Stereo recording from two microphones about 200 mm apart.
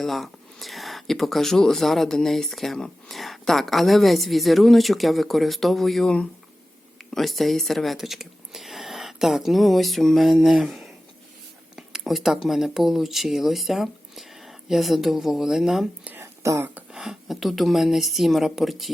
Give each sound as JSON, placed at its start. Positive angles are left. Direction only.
{"t": 0.0, "sound": "speech", "side_deg": 0}
{"t": 11.8, "sound": "a sound", "side_deg": 0}
{"t": 12.5, "sound": "speech", "side_deg": 0}